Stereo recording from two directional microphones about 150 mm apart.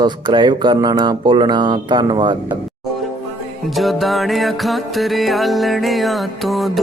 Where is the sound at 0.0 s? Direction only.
30° right (ahead or behind).